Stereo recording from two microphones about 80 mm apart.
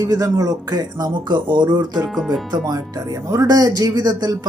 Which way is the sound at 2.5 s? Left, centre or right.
Right.